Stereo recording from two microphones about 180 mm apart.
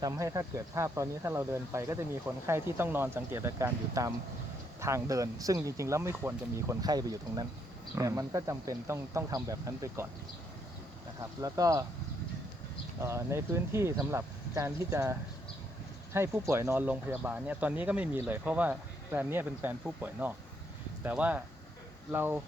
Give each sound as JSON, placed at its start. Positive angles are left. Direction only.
{"t": 0.0, "sound": "speech", "side_deg": -15}
{"t": 11.2, "sound": "speech", "side_deg": -20}
{"t": 13.0, "sound": "speech", "side_deg": -15}